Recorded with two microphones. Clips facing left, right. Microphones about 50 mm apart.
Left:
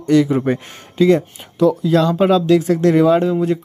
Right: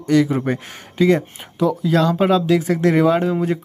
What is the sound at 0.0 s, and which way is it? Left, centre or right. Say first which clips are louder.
Speech: left 2 dB; centre.